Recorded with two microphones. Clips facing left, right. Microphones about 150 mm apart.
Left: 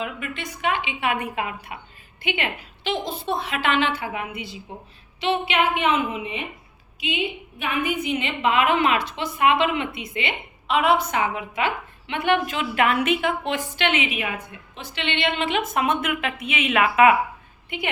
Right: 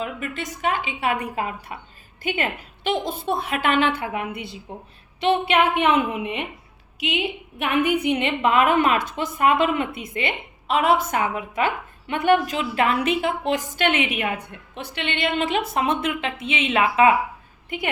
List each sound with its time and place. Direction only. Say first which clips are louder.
0.0 s a woman's voice: right 2 dB; 40° right (ahead or behind); by 6.4 s 65° right (ahead or behind)
7.6 s a woman's voice: right 5 dB; 65° right (ahead or behind); by 13.3 s 35° right (ahead or behind)
13.5 s a woman's voice: right 2 dB; 45° right (ahead or behind); by 17.2 s 30° right (ahead or behind)